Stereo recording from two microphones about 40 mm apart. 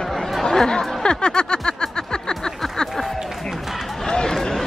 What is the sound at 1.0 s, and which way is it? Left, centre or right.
Snicker, centre.